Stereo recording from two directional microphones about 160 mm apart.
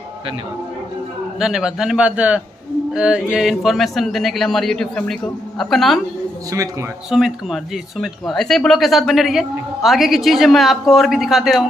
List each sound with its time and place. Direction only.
1.4 s a man's voice: 5° right (ahead or behind)
6.5 s speech: 20° right (ahead or behind)
7.1 s speech: centre (ahead or behind)